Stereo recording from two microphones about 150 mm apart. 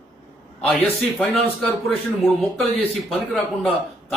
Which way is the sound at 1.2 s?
Centre (ahead or behind).